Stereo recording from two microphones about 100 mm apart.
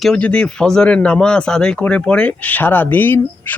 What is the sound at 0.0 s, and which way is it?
Speech, 10° left (ahead or behind).